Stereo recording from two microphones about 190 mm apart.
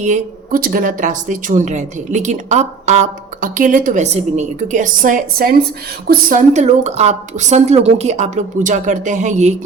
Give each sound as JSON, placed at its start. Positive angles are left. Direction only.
{"t": 0.0, "sound": "a woman's voice", "side_deg": -45}